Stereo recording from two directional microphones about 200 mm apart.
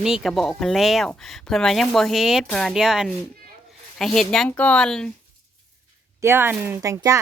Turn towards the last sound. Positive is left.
turn(degrees=-15)  # may be behind; listen again after turning